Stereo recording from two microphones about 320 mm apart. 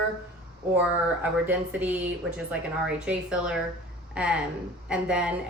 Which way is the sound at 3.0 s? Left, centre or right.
Centre.